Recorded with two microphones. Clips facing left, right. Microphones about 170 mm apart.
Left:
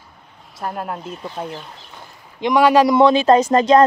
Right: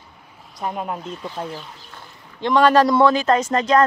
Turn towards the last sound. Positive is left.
turn(degrees=30)  # may be behind; listen again after turning